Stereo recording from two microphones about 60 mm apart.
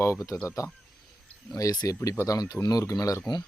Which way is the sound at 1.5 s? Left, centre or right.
Left.